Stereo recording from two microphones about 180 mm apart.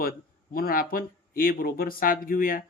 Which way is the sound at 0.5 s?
55° left (ahead or behind).